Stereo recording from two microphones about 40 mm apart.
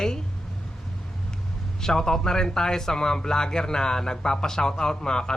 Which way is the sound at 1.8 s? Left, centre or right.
Centre.